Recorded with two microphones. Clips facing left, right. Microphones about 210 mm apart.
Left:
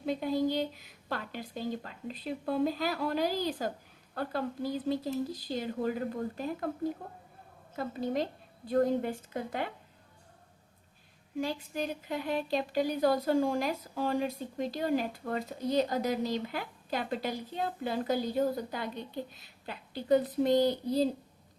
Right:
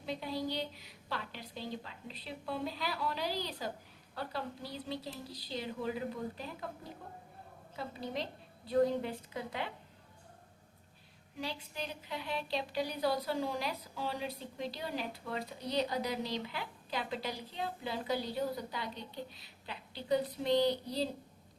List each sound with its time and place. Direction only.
0.0 s a woman's voice: 50° left (ahead or behind)
7.8 s a woman's voice: 50° left (ahead or behind)
11.3 s a woman's voice: 50° left (ahead or behind)